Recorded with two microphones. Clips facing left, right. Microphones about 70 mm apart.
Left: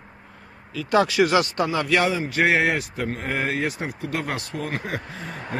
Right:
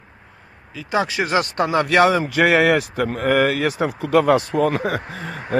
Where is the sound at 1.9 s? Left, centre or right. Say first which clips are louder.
Right 6 dB; right.